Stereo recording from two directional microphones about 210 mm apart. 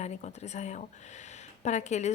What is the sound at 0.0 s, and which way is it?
A woman's voice, 35° left (ahead or behind).